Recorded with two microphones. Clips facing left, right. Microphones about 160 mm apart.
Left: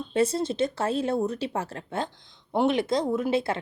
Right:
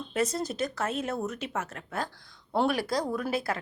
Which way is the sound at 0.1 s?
30° left (ahead or behind).